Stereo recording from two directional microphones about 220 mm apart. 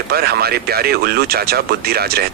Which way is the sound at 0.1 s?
45° right (ahead or behind).